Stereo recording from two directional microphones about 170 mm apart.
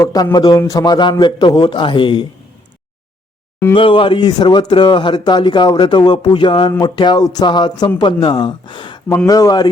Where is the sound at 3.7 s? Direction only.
30° left (ahead or behind).